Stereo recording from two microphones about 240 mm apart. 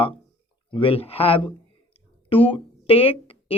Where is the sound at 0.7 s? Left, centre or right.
Left.